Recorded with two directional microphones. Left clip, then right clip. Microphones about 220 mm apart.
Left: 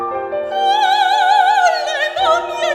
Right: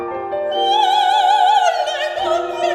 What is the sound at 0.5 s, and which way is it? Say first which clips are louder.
Opera: left 1 dB; 25° left (ahead or behind).